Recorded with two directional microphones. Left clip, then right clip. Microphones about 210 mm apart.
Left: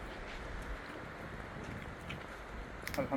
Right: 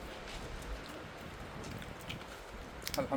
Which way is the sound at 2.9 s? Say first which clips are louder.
Right 1 dB; 35° right (ahead or behind).